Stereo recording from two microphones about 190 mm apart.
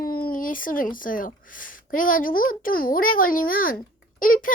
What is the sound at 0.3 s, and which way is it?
A woman's voice, 45° left (ahead or behind).